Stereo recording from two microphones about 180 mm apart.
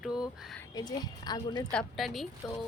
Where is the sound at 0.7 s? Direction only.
25° left (ahead or behind).